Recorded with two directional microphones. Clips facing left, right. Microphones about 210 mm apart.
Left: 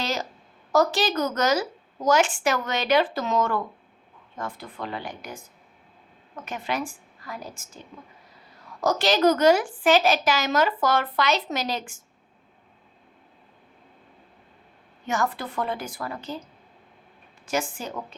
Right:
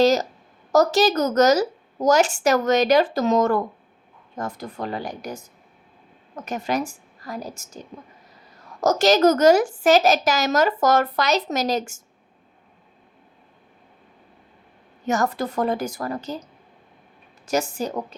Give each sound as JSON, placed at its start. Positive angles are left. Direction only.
{"t": 0.0, "sound": "a woman's voice", "side_deg": -40}
{"t": 8.8, "sound": "a woman's voice", "side_deg": -45}
{"t": 15.0, "sound": "a woman's voice", "side_deg": -40}
{"t": 17.4, "sound": "a woman's voice", "side_deg": -40}